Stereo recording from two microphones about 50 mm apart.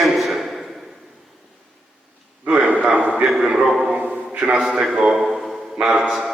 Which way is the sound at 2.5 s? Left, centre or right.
Right.